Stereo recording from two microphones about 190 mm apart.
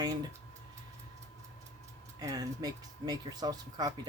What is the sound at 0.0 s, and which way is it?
Speech, 20° right (ahead or behind).